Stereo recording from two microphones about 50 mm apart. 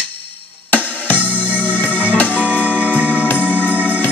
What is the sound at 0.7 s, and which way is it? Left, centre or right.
Music, left.